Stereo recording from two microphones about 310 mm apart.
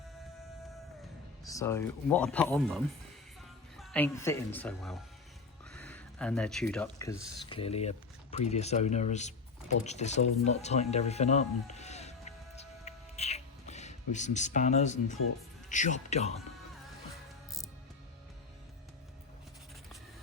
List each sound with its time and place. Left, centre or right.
1.5 s speech: centre
9.8 s a sound: left
15.7 s speech: left